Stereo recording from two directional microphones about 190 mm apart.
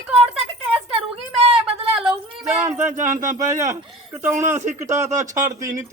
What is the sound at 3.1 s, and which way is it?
Speech, 40° right (ahead or behind).